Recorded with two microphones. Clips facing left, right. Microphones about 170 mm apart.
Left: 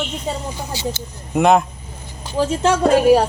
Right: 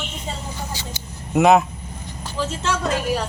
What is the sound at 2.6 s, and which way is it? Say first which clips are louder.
Speech: left 10 dB; 55° left (ahead or behind).